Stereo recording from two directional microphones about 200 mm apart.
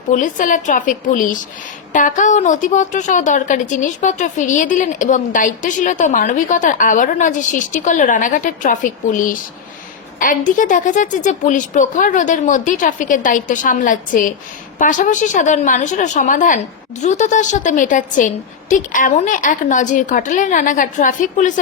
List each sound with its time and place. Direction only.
0.1 s a woman's voice: 40° left (ahead or behind)